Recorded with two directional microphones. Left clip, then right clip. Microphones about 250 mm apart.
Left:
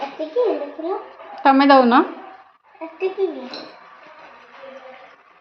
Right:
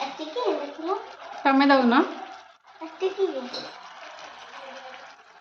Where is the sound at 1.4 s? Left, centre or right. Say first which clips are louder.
Left 7 dB; centre.